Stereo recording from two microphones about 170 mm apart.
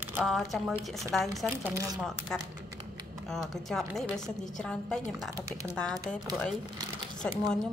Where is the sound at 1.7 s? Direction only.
20° right (ahead or behind).